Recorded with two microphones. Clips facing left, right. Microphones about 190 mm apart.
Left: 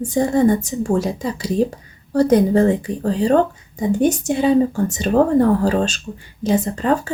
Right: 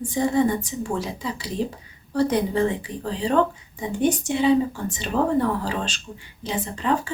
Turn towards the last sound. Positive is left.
turn(degrees=45)  # may be behind; listen again after turning